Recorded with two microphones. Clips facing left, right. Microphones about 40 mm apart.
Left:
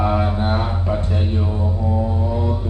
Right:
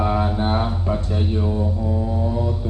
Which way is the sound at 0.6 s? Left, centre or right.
Left.